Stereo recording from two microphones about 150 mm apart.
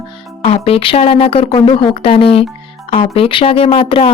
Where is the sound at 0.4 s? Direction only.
40° left (ahead or behind).